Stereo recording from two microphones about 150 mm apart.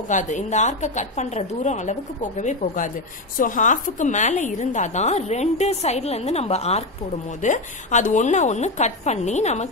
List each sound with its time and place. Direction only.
0.1 s a woman's voice: 55° left (ahead or behind)
7.4 s a woman's voice: 55° left (ahead or behind)